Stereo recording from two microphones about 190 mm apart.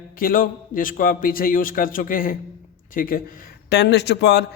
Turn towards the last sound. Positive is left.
turn(degrees=65)  # may be behind; listen again after turning